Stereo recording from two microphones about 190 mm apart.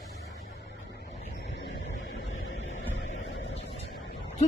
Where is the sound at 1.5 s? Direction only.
65° left (ahead or behind).